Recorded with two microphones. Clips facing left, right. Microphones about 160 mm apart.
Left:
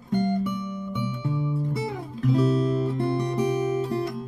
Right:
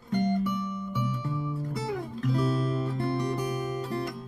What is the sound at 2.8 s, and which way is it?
Guitar, centre (ahead or behind).